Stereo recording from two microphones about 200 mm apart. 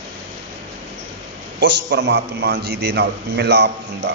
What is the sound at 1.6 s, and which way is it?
A man's voice, 60° right (ahead or behind).